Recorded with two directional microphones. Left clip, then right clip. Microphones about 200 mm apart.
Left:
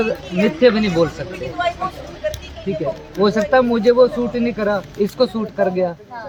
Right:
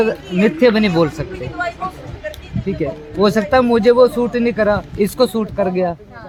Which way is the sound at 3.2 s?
55° right (ahead or behind).